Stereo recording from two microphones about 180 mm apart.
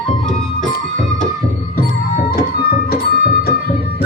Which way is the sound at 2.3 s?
60° left (ahead or behind).